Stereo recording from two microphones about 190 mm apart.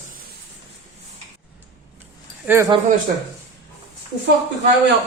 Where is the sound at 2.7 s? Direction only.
25° right (ahead or behind).